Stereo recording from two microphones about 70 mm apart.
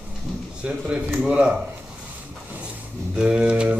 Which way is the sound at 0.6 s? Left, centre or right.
Centre.